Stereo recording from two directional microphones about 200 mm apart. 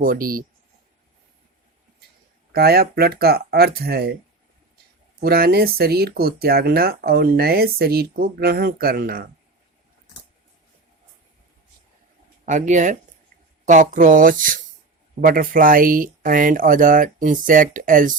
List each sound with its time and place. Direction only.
0.0 s speech: 45° right (ahead or behind)
2.5 s speech: 50° right (ahead or behind)
5.2 s speech: 50° right (ahead or behind)
12.5 s speech: 40° right (ahead or behind)